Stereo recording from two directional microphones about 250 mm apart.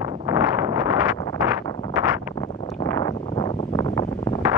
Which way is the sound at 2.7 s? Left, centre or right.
Centre.